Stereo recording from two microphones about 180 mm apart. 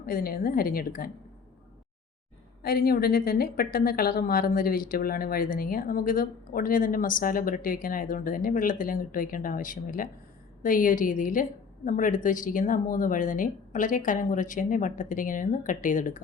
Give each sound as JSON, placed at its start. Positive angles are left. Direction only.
{"t": 0.0, "sound": "a woman's voice", "side_deg": 55}
{"t": 2.6, "sound": "a woman's voice", "side_deg": 55}